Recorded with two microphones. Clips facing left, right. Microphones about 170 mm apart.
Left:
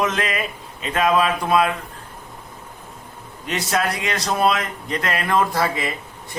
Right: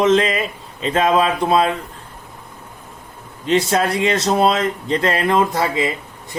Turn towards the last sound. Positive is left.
turn(degrees=-25)  # may be behind; listen again after turning